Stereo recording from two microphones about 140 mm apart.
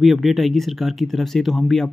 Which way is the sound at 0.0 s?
Centre (ahead or behind).